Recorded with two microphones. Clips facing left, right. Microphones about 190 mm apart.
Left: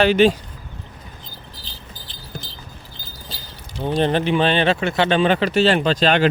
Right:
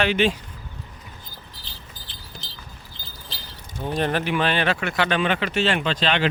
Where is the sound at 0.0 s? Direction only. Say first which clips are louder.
Left 6 dB; 35° left (ahead or behind).